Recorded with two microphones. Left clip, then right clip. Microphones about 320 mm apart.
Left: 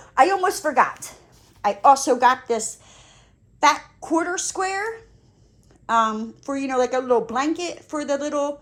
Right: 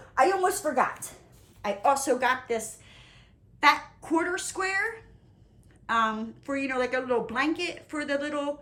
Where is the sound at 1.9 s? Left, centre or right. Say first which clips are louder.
Left 8 dB; left.